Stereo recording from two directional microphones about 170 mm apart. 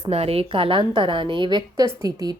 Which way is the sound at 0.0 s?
35° right (ahead or behind).